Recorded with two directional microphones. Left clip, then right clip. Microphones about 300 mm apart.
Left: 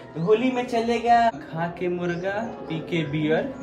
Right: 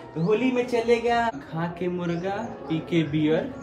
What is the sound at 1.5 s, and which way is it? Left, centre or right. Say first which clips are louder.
Speech: left 2 dB; centre.